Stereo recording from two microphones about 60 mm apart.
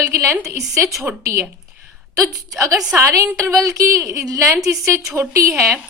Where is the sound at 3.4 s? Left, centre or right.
Right.